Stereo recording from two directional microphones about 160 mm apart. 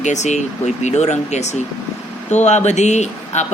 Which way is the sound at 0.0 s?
45° left (ahead or behind).